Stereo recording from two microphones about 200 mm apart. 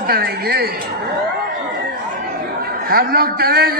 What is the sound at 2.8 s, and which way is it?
Speech, 50° right (ahead or behind).